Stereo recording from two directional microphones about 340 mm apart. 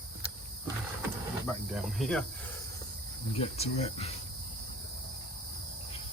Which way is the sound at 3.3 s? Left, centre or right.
Centre.